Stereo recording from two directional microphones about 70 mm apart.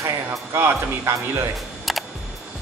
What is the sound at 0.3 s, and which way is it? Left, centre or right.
Speech, right.